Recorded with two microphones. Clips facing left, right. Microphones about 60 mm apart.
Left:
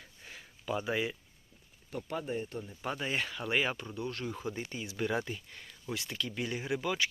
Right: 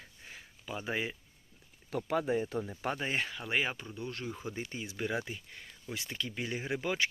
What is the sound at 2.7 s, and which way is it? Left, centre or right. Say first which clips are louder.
Speech: right 2 dB; right.